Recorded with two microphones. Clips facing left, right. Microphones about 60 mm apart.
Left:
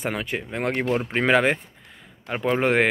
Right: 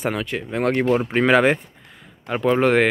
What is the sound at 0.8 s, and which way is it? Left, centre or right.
Speech, centre.